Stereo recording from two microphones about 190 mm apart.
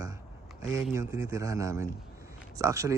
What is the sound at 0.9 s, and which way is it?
Speech, 15° right (ahead or behind).